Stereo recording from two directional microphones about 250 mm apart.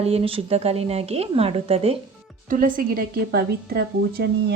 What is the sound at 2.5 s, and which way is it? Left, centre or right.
A woman's voice, right.